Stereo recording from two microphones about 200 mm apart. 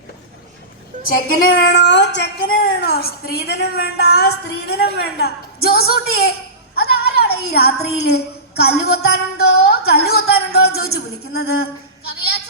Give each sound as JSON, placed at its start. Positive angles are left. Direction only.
{"t": 1.0, "sound": "a woman's voice", "side_deg": 50}
{"t": 6.7, "sound": "music", "side_deg": 55}
{"t": 8.0, "sound": "a woman's voice", "side_deg": 55}